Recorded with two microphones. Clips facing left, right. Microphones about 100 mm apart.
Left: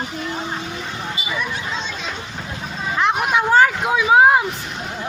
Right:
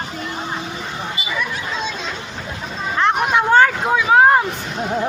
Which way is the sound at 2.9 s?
Centre (ahead or behind).